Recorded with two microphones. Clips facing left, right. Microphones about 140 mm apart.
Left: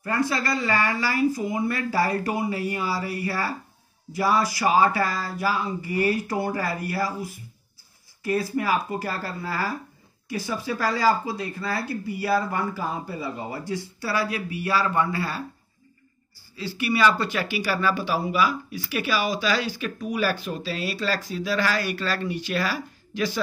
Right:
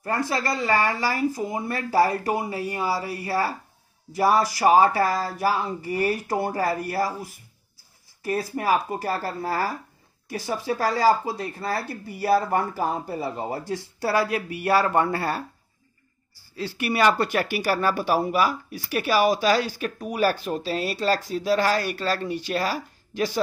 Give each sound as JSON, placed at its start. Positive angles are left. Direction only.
{"t": 0.0, "sound": "speech", "side_deg": -40}
{"t": 8.3, "sound": "speech", "side_deg": -40}
{"t": 11.2, "sound": "speech", "side_deg": -40}
{"t": 16.5, "sound": "speech", "side_deg": -50}